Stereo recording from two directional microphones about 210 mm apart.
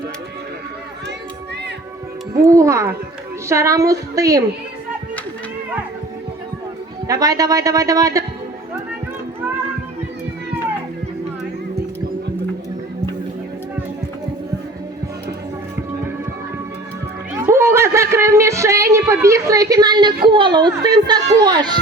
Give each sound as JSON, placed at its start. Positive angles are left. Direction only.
{"t": 2.4, "sound": "a man's voice", "side_deg": -15}
{"t": 7.1, "sound": "a man's voice", "side_deg": -15}
{"t": 17.4, "sound": "a woman's voice", "side_deg": -10}